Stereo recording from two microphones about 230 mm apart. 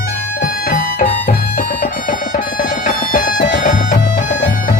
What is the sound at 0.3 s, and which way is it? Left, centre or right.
Music, left.